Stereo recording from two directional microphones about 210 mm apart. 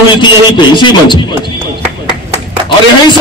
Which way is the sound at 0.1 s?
20° left (ahead or behind).